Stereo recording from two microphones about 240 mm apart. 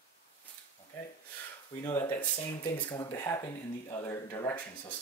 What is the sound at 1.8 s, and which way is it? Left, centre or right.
Speech, centre.